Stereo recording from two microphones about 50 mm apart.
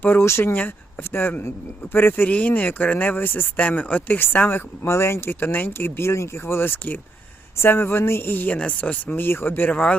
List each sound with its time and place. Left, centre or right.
0.2 s speech: left
2.3 s speech: left
3.6 s speech: left
4.9 s speech: left
8.4 s speech: left
9.2 s speech: left